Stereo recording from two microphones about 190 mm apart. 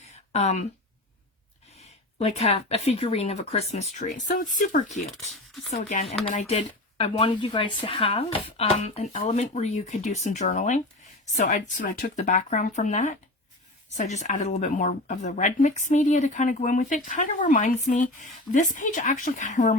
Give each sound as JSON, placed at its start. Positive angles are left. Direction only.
{"t": 0.3, "sound": "speech", "side_deg": 35}
{"t": 2.1, "sound": "speech", "side_deg": 30}